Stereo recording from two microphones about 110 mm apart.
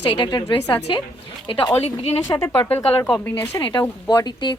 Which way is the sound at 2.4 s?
20° left (ahead or behind).